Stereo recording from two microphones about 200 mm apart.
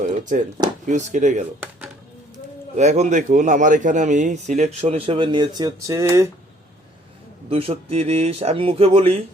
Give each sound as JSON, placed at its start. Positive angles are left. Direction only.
{"t": 0.0, "sound": "speech", "side_deg": -40}
{"t": 2.7, "sound": "speech", "side_deg": -35}
{"t": 7.5, "sound": "speech", "side_deg": -30}